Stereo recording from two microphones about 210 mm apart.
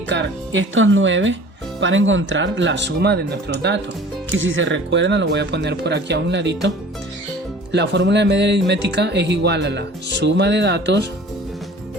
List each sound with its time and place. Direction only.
0.1 s speech: 60° right (ahead or behind)
4.3 s speech: 65° right (ahead or behind)